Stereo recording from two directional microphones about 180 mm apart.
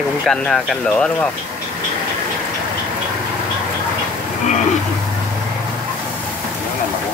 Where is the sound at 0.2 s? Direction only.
5° left (ahead or behind).